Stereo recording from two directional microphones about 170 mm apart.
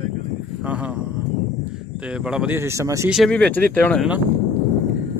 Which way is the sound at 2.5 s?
15° right (ahead or behind).